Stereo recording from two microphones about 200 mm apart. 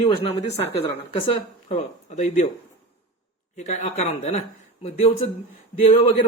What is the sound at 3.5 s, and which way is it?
Speech, 35° left (ahead or behind).